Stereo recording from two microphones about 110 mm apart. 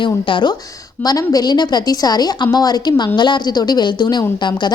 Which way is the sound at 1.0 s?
35° left (ahead or behind).